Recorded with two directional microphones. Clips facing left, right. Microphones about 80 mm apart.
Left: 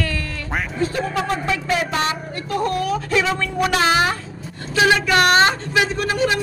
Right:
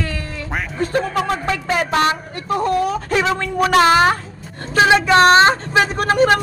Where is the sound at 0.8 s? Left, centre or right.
Right.